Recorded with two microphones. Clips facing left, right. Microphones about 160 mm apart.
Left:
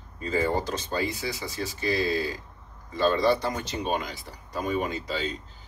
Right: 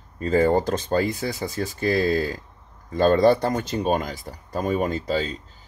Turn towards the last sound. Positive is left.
turn(degrees=-45)  # may be behind; listen again after turning